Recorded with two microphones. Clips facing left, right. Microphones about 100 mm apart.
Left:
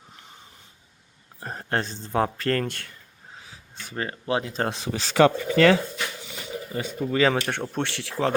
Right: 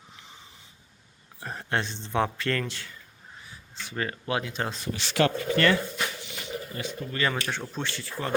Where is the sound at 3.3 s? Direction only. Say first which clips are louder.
Left 2 dB; 90° left.